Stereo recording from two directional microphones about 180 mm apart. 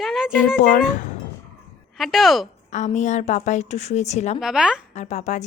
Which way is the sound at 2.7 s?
40° left (ahead or behind).